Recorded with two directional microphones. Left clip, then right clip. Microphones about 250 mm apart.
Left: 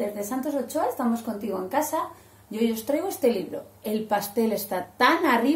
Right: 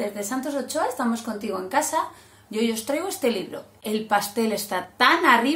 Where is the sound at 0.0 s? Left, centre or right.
Centre.